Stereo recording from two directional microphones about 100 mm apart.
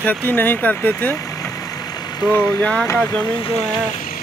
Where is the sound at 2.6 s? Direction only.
10° left (ahead or behind).